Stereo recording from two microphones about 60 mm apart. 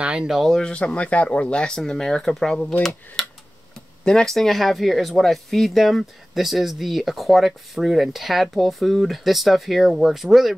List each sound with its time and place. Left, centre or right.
0.0 s speech: centre
0.3 s speech: centre
0.6 s speech: centre
3.2 s tick-tock: centre
4.0 s speech: centre